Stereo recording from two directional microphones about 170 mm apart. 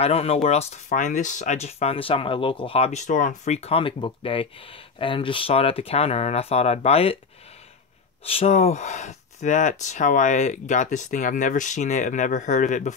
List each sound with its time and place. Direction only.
0.0 s speech: 40° left (ahead or behind)
8.3 s speech: 35° left (ahead or behind)